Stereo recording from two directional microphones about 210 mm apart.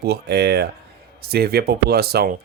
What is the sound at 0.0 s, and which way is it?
Speech, 50° right (ahead or behind).